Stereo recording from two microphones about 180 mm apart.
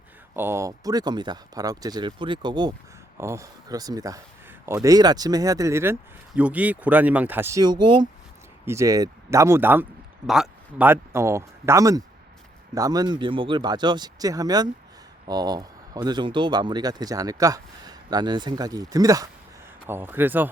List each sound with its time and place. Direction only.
0.3 s speech: 15° right (ahead or behind)
8.6 s speech: 15° right (ahead or behind)